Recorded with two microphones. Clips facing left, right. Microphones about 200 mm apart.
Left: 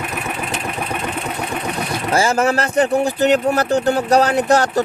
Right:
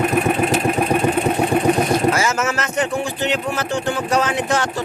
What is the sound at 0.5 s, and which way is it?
Vehicle, 40° right (ahead or behind).